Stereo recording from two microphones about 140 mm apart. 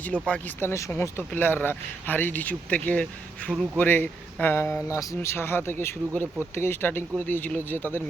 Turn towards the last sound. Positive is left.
turn(degrees=15)  # may be behind; listen again after turning